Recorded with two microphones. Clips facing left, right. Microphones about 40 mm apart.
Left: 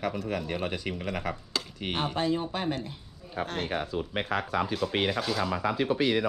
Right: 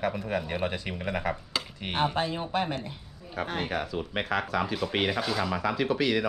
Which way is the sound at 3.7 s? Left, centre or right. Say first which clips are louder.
Even; right.